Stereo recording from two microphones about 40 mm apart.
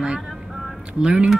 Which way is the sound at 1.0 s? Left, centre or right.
Right.